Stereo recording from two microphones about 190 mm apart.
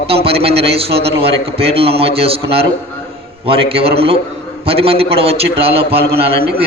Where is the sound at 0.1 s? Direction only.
30° right (ahead or behind).